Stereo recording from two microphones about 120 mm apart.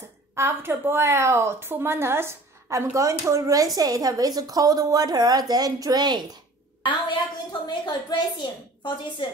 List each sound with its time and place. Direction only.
0.3 s a woman's voice: 20° right (ahead or behind)
6.8 s a woman's voice: 45° left (ahead or behind)